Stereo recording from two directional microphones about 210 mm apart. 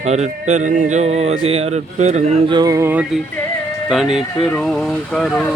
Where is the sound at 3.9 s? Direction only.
Centre (ahead or behind).